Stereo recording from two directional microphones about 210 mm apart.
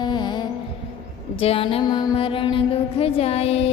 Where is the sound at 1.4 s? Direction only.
25° left (ahead or behind).